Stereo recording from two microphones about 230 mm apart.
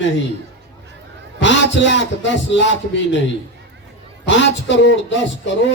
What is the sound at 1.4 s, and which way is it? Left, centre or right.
Speech, left.